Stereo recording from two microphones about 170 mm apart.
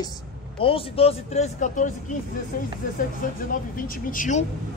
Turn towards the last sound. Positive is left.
turn(degrees=50)  # may be behind; listen again after turning